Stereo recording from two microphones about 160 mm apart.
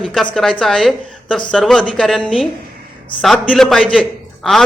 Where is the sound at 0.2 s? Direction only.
5° left (ahead or behind).